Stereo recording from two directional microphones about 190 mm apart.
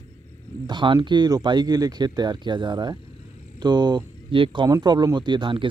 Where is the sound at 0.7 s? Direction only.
25° right (ahead or behind).